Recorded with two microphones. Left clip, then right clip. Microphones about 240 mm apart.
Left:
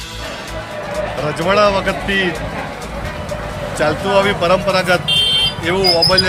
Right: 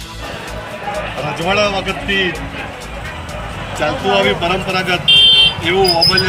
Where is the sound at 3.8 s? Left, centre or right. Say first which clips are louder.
Even; centre.